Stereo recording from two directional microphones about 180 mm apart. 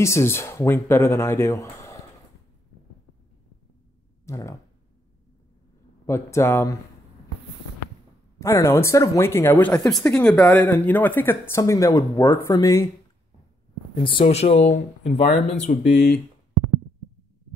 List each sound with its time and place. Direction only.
0.0 s speech: 15° left (ahead or behind)
4.3 s speech: 15° left (ahead or behind)
6.0 s speech: 15° left (ahead or behind)
8.4 s speech: 15° left (ahead or behind)
13.9 s speech: 30° left (ahead or behind)